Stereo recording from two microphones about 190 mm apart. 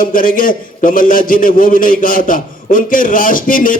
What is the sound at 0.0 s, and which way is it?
A man's voice, 45° left (ahead or behind).